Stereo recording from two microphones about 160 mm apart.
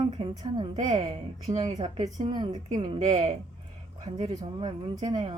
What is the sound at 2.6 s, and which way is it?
Speech, 40° right (ahead or behind).